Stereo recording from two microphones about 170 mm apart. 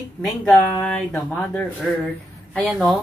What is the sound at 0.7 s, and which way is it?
A woman's voice, 10° left (ahead or behind).